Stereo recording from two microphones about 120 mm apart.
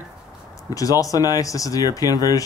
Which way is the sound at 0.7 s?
30° left (ahead or behind).